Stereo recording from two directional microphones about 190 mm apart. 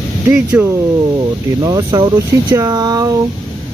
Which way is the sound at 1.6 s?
20° right (ahead or behind).